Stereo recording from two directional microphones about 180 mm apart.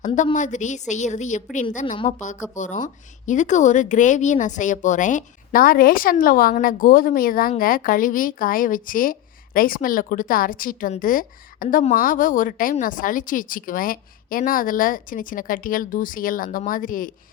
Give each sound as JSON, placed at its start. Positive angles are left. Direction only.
{"t": 0.3, "sound": "a woman's voice", "side_deg": 45}